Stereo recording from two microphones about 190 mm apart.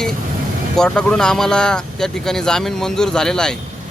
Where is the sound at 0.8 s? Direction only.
5° left (ahead or behind).